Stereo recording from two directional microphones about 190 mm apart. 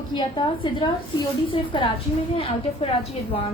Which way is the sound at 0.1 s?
25° left (ahead or behind).